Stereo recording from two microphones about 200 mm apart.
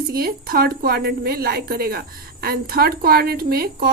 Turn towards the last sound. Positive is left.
turn(degrees=-50)  # may be behind; listen again after turning